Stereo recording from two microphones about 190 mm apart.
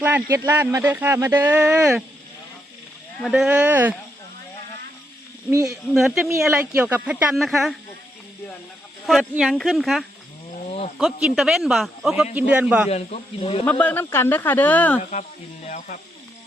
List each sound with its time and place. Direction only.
0.0 s speech: 10° right (ahead or behind)
3.2 s speech: centre (ahead or behind)
5.5 s speech: 15° right (ahead or behind)
5.9 s speech: centre (ahead or behind)
9.0 s speech: centre (ahead or behind)
10.7 s snake: 35° left (ahead or behind)
10.9 s speech: centre (ahead or behind)
12.9 s speech: 30° left (ahead or behind)
13.7 s speech: 10° left (ahead or behind)
15.6 s speech: 35° left (ahead or behind)